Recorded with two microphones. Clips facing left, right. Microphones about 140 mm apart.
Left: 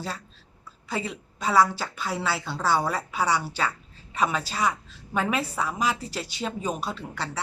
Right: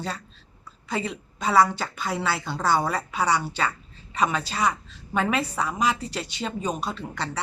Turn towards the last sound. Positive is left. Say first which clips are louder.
# right 2 dB
turn(degrees=5)  # may be behind; listen again after turning